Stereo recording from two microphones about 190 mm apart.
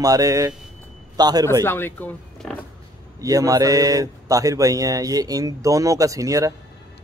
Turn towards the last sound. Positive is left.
turn(degrees=-15)  # may be behind; listen again after turning